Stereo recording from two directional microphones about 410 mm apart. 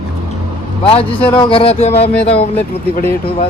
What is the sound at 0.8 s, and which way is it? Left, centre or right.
Speech, centre.